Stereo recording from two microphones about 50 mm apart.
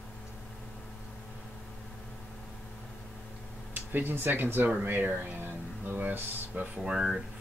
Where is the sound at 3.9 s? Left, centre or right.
Right.